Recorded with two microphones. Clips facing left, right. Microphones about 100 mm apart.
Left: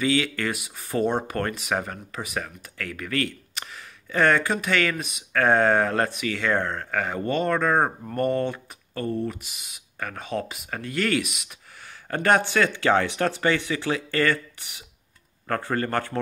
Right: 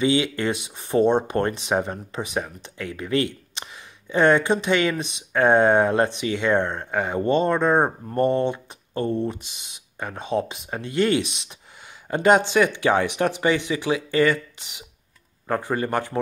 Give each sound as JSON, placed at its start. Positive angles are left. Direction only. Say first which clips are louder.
{"t": 0.0, "sound": "speech", "louder": "right 3 dB", "side_deg": -20}